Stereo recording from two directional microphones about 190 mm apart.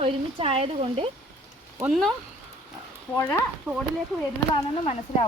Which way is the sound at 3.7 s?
5° right (ahead or behind).